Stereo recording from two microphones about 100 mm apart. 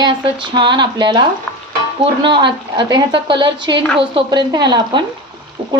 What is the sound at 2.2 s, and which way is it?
A woman's voice, 55° right (ahead or behind).